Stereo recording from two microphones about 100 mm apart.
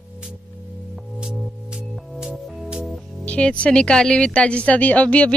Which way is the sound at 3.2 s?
10° left (ahead or behind).